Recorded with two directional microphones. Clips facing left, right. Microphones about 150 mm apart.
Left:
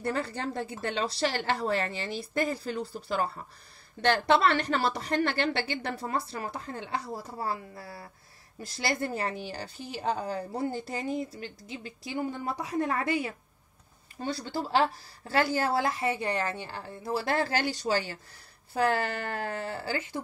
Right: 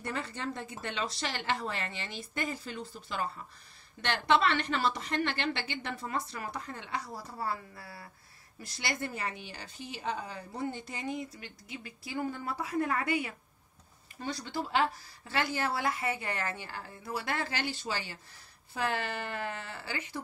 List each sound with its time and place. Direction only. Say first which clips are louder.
0.0 s a woman's voice: left 5 dB; 35° left (ahead or behind); by 12.7 s 20° left (ahead or behind)
12.7 s a woman's voice: left 2 dB; 30° left (ahead or behind)
17.1 s a woman's voice: left 7 dB; 35° left (ahead or behind)